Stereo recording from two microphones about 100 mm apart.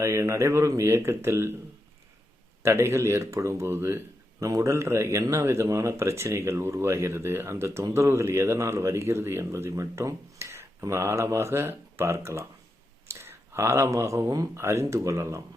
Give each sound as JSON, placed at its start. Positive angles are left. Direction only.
{"t": 0.0, "sound": "speech", "side_deg": -30}
{"t": 2.6, "sound": "speech", "side_deg": -25}